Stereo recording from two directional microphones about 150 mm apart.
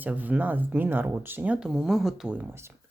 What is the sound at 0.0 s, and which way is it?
Speech, 10° right (ahead or behind).